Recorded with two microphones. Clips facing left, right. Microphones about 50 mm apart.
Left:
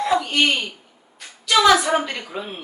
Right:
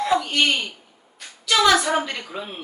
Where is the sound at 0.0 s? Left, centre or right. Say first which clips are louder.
Left 1 dB; centre.